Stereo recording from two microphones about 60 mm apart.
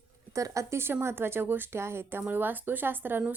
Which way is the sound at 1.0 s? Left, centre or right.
Right.